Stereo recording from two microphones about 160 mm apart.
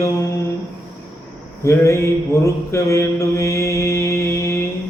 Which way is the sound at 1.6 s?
20° left (ahead or behind).